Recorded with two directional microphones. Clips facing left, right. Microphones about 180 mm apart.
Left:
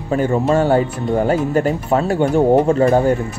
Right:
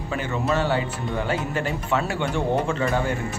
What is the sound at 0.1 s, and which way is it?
Speech, 45° left (ahead or behind).